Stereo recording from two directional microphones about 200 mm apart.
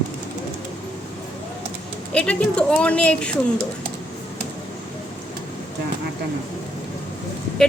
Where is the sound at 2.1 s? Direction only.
5° left (ahead or behind).